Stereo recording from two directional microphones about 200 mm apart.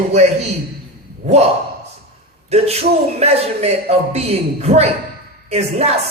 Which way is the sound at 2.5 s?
30° right (ahead or behind).